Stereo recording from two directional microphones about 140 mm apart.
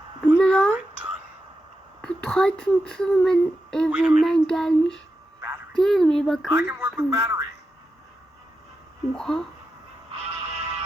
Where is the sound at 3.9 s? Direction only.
5° right (ahead or behind).